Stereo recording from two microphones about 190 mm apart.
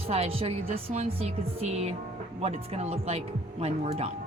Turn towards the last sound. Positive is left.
turn(degrees=-35)  # may be behind; listen again after turning